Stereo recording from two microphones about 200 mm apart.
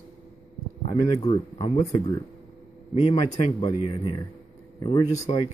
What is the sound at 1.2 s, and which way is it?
Speech, 35° left (ahead or behind).